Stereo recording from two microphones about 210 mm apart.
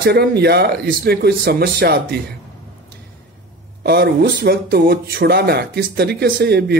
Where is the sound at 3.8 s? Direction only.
50° right (ahead or behind).